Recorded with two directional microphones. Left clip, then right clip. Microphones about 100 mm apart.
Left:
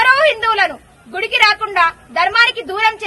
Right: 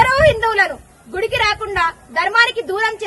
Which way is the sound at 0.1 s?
55° right (ahead or behind).